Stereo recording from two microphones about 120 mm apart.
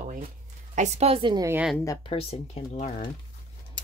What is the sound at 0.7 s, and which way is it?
Speech, 70° right (ahead or behind).